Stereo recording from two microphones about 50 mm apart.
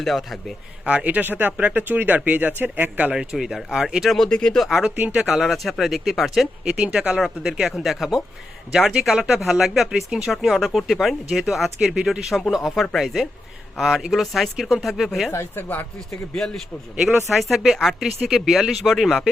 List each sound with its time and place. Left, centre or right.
0.0 s speech: centre
0.9 s speech: right
3.3 s speech: centre
4.2 s speech: centre
4.5 s speech: centre
6.7 s speech: right
7.1 s speech: centre
15.3 s speech: left
16.3 s speech: centre
17.2 s speech: centre